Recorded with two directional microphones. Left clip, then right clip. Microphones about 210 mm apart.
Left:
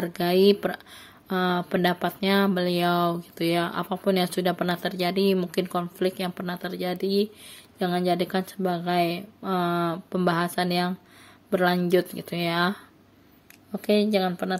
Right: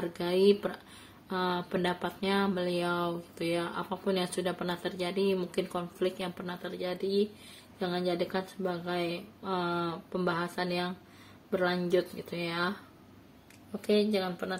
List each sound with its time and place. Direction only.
0.1 s speech: 40° left (ahead or behind)